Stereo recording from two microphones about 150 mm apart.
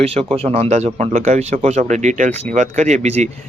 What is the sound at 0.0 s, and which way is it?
Speech, 40° right (ahead or behind).